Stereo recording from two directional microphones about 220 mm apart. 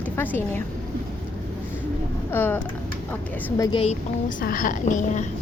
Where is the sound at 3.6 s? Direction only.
20° left (ahead or behind).